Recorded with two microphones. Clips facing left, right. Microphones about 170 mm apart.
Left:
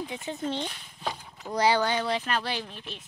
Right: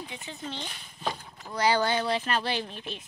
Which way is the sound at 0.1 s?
45° left (ahead or behind).